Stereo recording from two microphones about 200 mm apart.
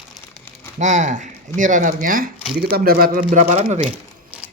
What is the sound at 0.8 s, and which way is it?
Speech, 35° right (ahead or behind).